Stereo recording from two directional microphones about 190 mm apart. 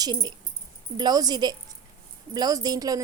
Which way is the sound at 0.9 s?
20° right (ahead or behind).